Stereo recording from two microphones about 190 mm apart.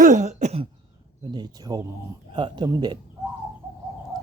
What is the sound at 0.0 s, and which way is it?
Throat clearing, 40° right (ahead or behind).